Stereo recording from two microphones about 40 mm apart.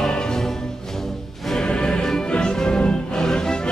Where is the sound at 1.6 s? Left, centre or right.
Left.